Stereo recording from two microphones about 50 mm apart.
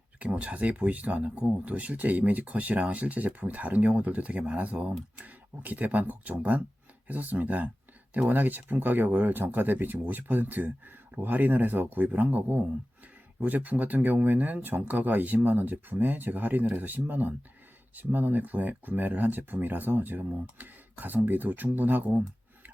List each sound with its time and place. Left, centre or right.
0.2 s speech: right